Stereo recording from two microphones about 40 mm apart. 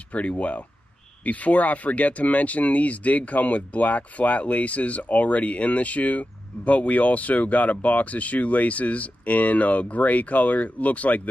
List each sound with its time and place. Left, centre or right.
0.1 s speech: left